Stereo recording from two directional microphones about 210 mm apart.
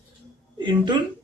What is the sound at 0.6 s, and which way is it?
Speech, 20° right (ahead or behind).